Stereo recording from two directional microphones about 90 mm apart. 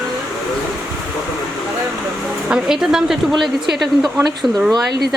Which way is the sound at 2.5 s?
5° right (ahead or behind).